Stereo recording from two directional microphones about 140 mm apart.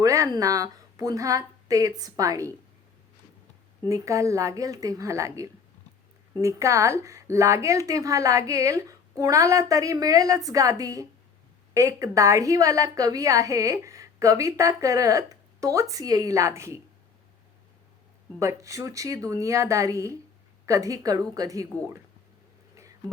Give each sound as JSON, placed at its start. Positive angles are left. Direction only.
{"t": 0.0, "sound": "a woman's voice", "side_deg": -25}
{"t": 3.8, "sound": "a woman's voice", "side_deg": -25}
{"t": 18.3, "sound": "a woman's voice", "side_deg": -20}
{"t": 22.7, "sound": "a sound", "side_deg": -20}